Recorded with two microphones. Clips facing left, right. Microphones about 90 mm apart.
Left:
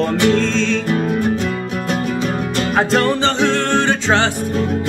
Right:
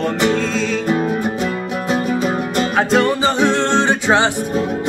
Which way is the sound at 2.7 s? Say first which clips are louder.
Even; 5° right (ahead or behind).